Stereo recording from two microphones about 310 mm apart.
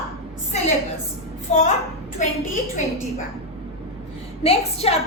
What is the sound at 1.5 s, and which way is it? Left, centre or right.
Speech, left.